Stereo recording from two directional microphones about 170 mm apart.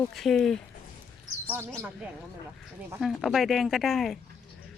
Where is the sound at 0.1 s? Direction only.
Centre (ahead or behind).